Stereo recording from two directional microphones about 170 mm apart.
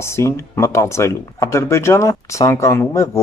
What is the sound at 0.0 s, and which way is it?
Speech, 15° left (ahead or behind).